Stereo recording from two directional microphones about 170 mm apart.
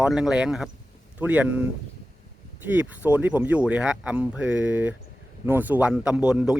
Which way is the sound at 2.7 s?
10° right (ahead or behind).